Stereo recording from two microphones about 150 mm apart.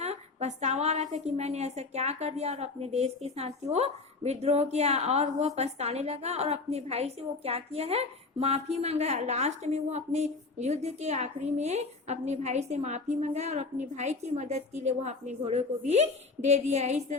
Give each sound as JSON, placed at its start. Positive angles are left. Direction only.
{"t": 0.0, "sound": "a woman's voice", "side_deg": -45}